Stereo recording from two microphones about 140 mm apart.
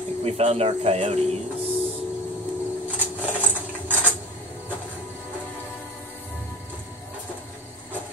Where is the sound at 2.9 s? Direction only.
10° right (ahead or behind).